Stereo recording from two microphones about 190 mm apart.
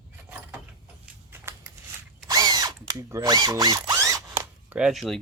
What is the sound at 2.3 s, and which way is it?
Drill, 20° right (ahead or behind).